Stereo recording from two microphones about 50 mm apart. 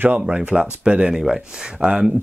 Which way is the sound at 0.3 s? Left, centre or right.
Centre.